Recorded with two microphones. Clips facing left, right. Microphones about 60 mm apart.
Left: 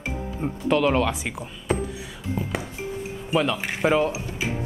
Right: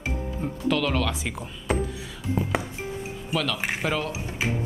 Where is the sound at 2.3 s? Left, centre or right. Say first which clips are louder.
Right 2 dB; centre.